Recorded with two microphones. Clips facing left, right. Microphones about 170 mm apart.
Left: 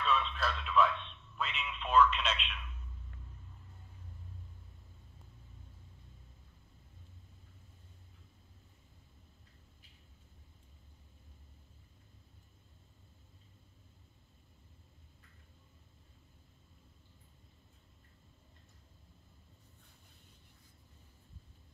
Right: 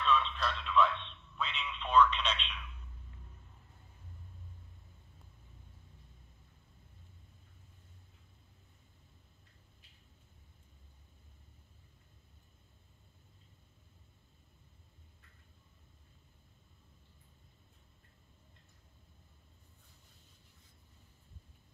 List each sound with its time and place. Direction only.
0.0 s radio: 5° left (ahead or behind)
1.3 s telephone: 5° left (ahead or behind)